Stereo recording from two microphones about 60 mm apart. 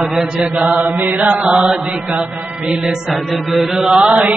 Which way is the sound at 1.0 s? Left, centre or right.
Right.